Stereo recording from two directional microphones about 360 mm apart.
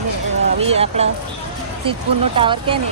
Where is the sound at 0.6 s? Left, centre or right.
Centre.